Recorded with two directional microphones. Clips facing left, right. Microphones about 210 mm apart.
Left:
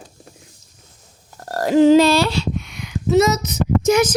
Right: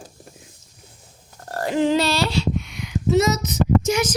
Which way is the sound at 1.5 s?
40° left (ahead or behind).